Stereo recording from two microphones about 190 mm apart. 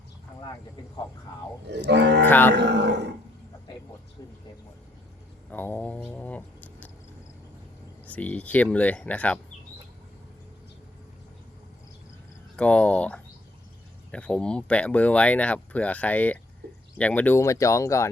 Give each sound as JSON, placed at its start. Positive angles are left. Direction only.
{"t": 1.7, "sound": "speech", "side_deg": -65}
{"t": 2.2, "sound": "speech", "side_deg": 10}
{"t": 2.6, "sound": "speech", "side_deg": -65}
{"t": 5.5, "sound": "speech", "side_deg": 10}
{"t": 8.0, "sound": "speech", "side_deg": 10}
{"t": 12.5, "sound": "speech", "side_deg": 5}